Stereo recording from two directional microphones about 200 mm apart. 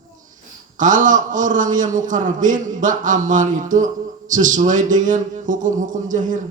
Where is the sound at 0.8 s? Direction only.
40° right (ahead or behind).